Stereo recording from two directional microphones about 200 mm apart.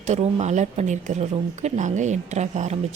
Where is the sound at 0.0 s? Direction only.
35° right (ahead or behind).